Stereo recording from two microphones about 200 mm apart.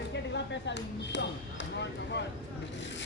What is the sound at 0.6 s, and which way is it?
Speech, 60° left (ahead or behind).